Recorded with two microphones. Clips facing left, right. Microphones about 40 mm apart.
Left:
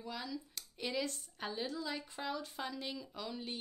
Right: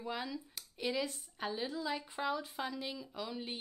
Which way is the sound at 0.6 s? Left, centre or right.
Centre.